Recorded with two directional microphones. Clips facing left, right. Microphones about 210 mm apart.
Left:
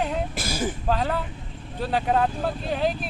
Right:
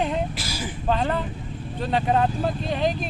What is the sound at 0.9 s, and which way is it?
Speech, 5° left (ahead or behind).